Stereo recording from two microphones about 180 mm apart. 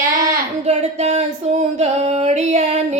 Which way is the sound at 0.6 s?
35° right (ahead or behind).